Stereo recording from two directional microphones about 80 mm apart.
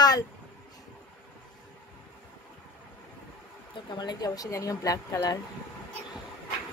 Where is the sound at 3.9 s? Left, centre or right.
Left.